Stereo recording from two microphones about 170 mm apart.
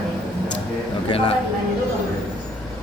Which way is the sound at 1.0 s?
30° left (ahead or behind).